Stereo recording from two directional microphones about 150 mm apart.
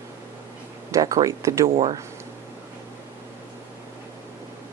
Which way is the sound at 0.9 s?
25° right (ahead or behind).